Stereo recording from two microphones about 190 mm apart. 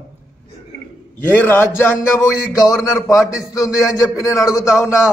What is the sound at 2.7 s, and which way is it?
Speech, centre (ahead or behind).